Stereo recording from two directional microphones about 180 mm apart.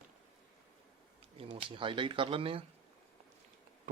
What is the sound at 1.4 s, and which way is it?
Speech, 30° right (ahead or behind).